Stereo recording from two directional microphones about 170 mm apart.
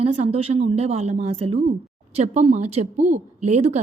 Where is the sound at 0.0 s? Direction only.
35° right (ahead or behind).